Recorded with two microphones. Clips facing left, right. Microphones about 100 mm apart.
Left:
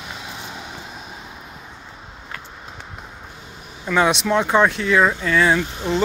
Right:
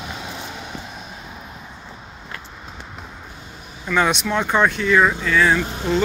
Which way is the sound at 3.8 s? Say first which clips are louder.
Left 1 dB; 25° left (ahead or behind).